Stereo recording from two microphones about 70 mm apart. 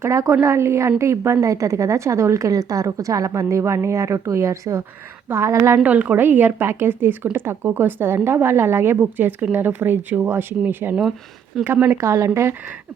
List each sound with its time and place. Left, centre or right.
0.0 s a woman's voice: right
5.8 s a woman's voice: right
11.9 s speech: right